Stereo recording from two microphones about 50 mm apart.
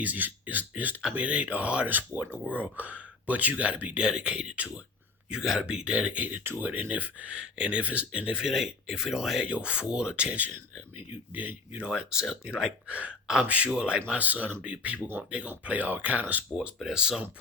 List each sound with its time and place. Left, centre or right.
0.0 s speech: right
4.0 s speech: centre
5.3 s speech: centre; by 6.4 s right
6.4 s speech: right
7.3 s speech: right
8.3 s speech: centre
9.4 s speech: right
10.9 s speech: right
11.9 s speech: centre
12.9 s speech: right
16.6 s speech: centre